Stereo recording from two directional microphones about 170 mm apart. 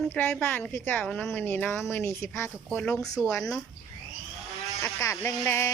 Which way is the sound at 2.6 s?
5° left (ahead or behind).